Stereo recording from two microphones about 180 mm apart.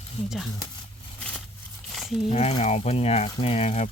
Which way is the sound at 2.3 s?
35° left (ahead or behind).